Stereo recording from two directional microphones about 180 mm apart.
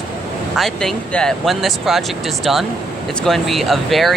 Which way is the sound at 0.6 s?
Centre (ahead or behind).